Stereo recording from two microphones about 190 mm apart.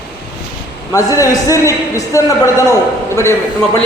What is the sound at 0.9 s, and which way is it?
A man's voice, 15° left (ahead or behind).